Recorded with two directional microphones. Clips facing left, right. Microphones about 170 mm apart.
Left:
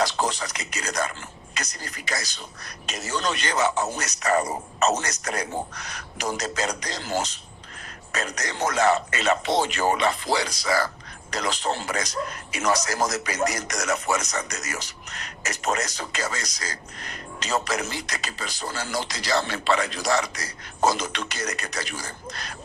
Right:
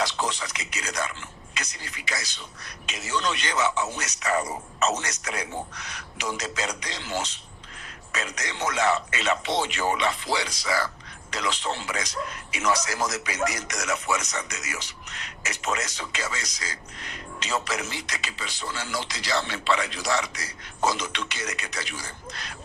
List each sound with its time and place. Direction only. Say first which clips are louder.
0.0 s a man's voice: left 3 dB; 40° left (ahead or behind)